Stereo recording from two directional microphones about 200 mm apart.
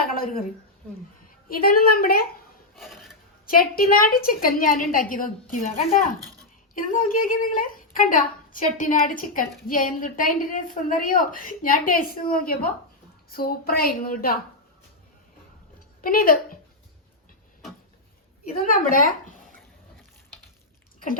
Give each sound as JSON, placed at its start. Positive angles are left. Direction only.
{"t": 0.0, "sound": "a sound", "side_deg": 45}
{"t": 1.6, "sound": "a woman's voice", "side_deg": 50}
{"t": 2.7, "sound": "filing", "side_deg": 0}
{"t": 3.4, "sound": "a woman's voice", "side_deg": 45}
{"t": 16.0, "sound": "a woman's voice", "side_deg": 45}
{"t": 18.6, "sound": "a woman's voice", "side_deg": 45}